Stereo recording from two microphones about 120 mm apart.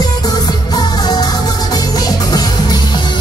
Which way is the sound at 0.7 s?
35° left (ahead or behind).